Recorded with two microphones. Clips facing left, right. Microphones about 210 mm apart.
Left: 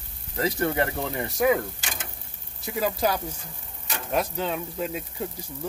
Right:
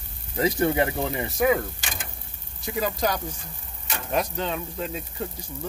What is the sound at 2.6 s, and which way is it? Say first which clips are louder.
Speech: left 1 dB; 5° left (ahead or behind).